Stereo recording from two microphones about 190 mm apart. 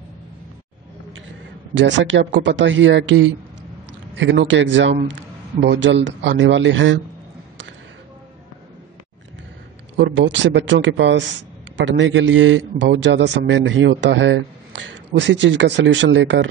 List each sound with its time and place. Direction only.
1.8 s speech: 80° right
9.9 s speech: 70° right (ahead or behind)